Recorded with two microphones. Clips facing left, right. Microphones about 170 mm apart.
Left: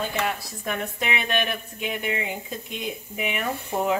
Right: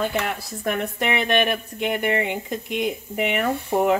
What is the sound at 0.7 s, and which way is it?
Speech, 65° right (ahead or behind).